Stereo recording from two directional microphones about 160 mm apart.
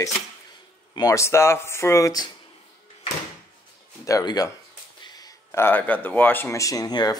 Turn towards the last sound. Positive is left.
turn(degrees=25)  # may be behind; listen again after turning